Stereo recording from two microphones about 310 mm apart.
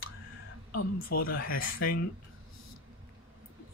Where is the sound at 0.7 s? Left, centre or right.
Left.